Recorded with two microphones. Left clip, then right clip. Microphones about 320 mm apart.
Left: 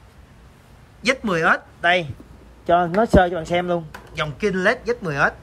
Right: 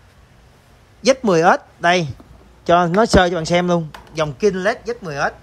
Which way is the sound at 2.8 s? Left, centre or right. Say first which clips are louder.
Right 4 dB; left.